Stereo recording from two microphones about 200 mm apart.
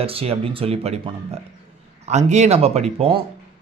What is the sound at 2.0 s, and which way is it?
Speech, 35° right (ahead or behind).